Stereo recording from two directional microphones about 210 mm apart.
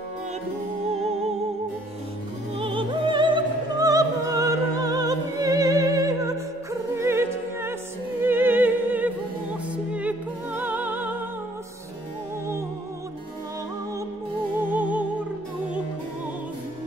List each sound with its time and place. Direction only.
2.6 s music: 25° right (ahead or behind)
7.0 s opera: 10° right (ahead or behind)
8.2 s music: 10° right (ahead or behind)
14.6 s music: 10° right (ahead or behind)